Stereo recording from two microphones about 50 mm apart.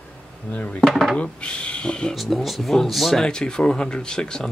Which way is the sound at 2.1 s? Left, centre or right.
Centre.